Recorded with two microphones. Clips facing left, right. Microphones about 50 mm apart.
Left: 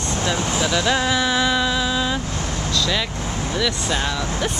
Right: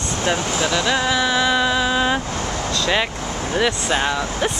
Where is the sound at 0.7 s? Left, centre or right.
Centre; by 2.1 s right.